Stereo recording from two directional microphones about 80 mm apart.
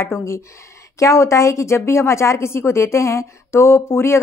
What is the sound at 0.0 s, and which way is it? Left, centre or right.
A woman's voice, left.